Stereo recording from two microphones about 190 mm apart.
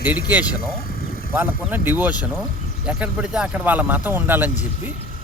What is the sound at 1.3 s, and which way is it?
A man's voice, 10° right (ahead or behind).